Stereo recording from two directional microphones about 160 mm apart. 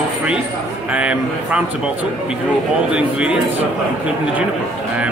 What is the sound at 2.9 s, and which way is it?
Speech, 5° right (ahead or behind).